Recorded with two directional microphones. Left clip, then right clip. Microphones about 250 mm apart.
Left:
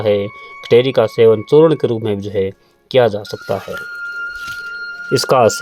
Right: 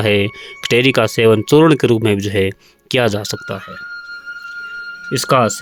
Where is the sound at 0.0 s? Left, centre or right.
Right.